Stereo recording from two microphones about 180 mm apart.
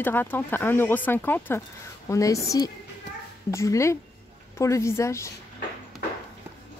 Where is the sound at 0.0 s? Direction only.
10° left (ahead or behind).